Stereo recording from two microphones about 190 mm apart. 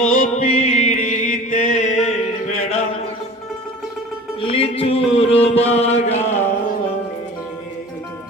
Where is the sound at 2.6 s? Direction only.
35° left (ahead or behind).